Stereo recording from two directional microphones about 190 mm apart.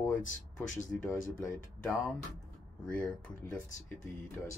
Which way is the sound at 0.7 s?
45° left (ahead or behind).